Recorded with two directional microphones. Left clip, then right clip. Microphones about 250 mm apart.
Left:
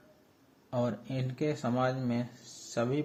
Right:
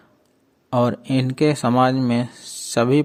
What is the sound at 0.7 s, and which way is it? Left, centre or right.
Speech, right.